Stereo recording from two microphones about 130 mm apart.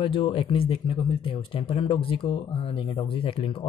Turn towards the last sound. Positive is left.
turn(degrees=45)  # may be behind; listen again after turning